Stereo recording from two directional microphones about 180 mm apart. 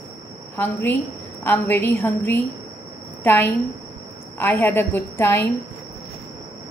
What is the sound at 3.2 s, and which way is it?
A woman's voice, 10° left (ahead or behind).